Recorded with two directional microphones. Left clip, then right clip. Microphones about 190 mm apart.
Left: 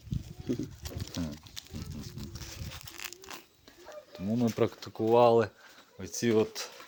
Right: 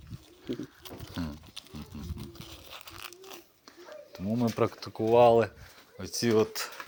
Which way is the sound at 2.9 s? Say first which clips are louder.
Left 4 dB; 20° left (ahead or behind).